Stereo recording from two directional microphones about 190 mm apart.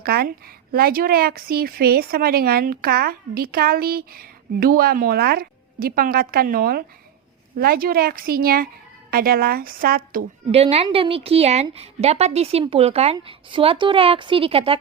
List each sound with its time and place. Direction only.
0.0 s speech: 55° right (ahead or behind)
10.5 s a woman's voice: 30° right (ahead or behind)